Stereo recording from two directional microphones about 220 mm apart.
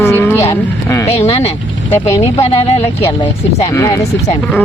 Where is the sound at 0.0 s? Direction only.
10° left (ahead or behind).